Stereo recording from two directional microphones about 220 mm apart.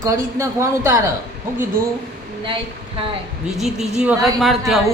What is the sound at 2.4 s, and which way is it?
Speech, 25° right (ahead or behind).